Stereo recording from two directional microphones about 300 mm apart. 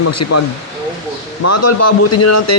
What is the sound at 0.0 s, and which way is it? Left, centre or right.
A man's voice, left.